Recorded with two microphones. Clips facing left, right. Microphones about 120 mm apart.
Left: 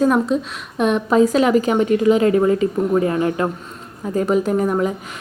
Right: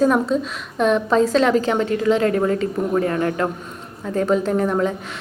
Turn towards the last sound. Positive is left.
turn(degrees=5)  # may be behind; listen again after turning